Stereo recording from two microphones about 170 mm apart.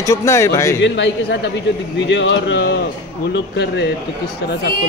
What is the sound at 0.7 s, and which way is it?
A man's voice, 90° left.